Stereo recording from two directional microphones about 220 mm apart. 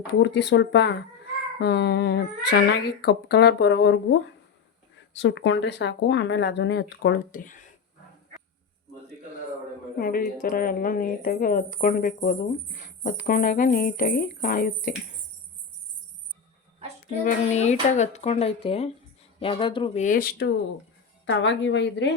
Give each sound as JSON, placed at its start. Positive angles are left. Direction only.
{"t": 0.1, "sound": "speech", "side_deg": 55}
{"t": 10.0, "sound": "speech", "side_deg": 40}
{"t": 17.2, "sound": "speech", "side_deg": 30}
{"t": 21.2, "sound": "a woman's voice", "side_deg": 55}